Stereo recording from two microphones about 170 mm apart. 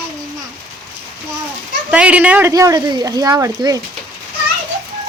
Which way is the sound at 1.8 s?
5° right (ahead or behind).